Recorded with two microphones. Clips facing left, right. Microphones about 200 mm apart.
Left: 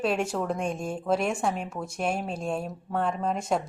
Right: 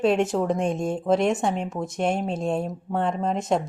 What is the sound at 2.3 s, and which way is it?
Speech, 25° right (ahead or behind).